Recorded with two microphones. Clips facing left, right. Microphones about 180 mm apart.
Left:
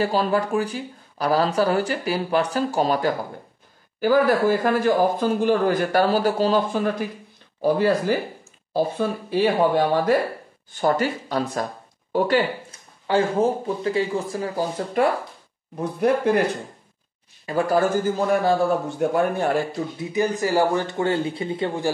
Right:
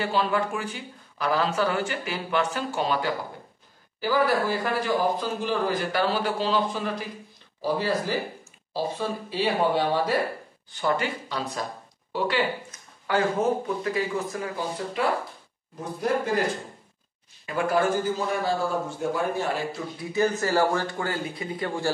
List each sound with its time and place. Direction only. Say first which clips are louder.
0.0 s a man's voice: left 4 dB; 40° left (ahead or behind)
13.0 s speech: left 4 dB; 30° left (ahead or behind)
15.0 s a man's voice: left 6 dB; 50° left (ahead or behind)
15.7 s speech: left 6 dB; 65° left (ahead or behind)
17.5 s a man's voice: left 4 dB; 35° left (ahead or behind); by 19.6 s 55° left (ahead or behind)
20.0 s speech: left 1 dB; 15° left (ahead or behind)